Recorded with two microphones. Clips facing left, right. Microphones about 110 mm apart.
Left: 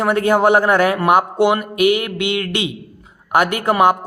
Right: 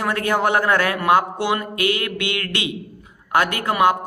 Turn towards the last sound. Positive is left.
turn(degrees=25)  # may be behind; listen again after turning